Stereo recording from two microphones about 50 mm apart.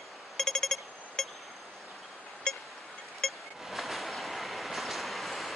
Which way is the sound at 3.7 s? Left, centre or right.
Centre.